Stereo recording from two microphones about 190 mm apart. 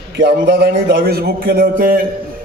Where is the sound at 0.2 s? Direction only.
60° right (ahead or behind).